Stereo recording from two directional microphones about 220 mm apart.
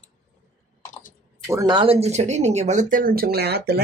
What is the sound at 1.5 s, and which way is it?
Speech, 20° right (ahead or behind).